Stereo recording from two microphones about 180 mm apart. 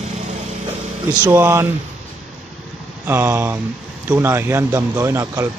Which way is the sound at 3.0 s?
15° right (ahead or behind).